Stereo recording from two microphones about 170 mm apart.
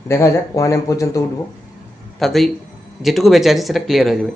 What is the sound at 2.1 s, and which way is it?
A man's voice, centre (ahead or behind).